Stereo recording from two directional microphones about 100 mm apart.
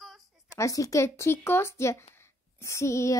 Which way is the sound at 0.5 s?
30° left (ahead or behind).